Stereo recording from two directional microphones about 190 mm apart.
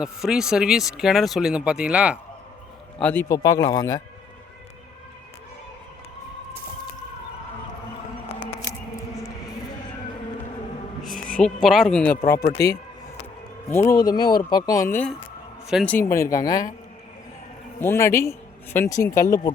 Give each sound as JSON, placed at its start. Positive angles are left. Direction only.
{"t": 0.0, "sound": "speech", "side_deg": -5}
{"t": 3.0, "sound": "a man's voice", "side_deg": 10}
{"t": 11.2, "sound": "speech", "side_deg": 5}
{"t": 12.2, "sound": "a man's voice", "side_deg": 15}
{"t": 13.7, "sound": "a man's voice", "side_deg": 15}
{"t": 15.6, "sound": "a man's voice", "side_deg": 0}
{"t": 16.1, "sound": "a man's voice", "side_deg": 15}
{"t": 17.7, "sound": "speech", "side_deg": 15}